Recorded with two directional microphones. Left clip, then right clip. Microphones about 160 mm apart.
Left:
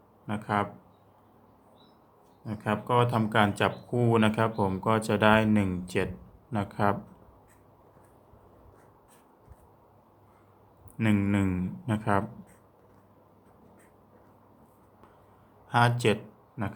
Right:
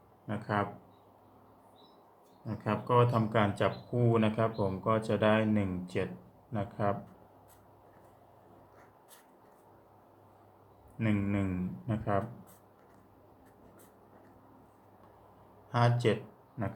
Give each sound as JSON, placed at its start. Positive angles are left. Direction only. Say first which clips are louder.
{"t": 0.3, "sound": "speech", "louder": "left 4 dB", "side_deg": 30}
{"t": 2.5, "sound": "speech", "louder": "left 3 dB", "side_deg": 25}
{"t": 10.9, "sound": "a man's voice", "louder": "left 6 dB", "side_deg": 55}
{"t": 15.7, "sound": "speech", "louder": "left 5 dB", "side_deg": 45}